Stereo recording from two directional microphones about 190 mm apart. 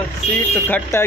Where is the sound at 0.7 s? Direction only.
15° left (ahead or behind).